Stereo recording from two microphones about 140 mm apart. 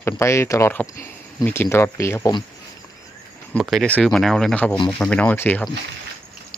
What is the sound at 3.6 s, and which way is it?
Speech, centre (ahead or behind).